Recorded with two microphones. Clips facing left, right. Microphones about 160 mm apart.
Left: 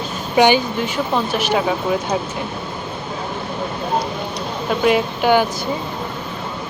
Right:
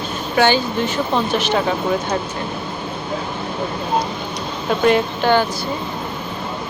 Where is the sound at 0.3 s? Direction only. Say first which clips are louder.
Left 2 dB; 15° left (ahead or behind).